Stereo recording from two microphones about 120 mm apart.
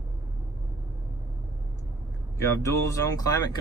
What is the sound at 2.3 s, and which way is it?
Speech, 25° left (ahead or behind).